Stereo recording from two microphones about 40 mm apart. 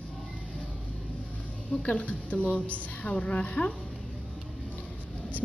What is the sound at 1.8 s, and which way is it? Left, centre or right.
A woman's voice, left.